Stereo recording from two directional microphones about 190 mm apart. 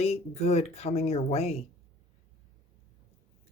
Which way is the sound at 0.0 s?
35° left (ahead or behind).